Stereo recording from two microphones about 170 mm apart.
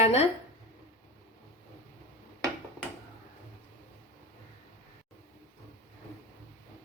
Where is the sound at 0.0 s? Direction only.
40° left (ahead or behind).